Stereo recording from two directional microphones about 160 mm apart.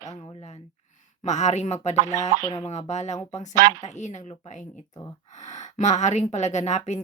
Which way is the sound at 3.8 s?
45° left (ahead or behind).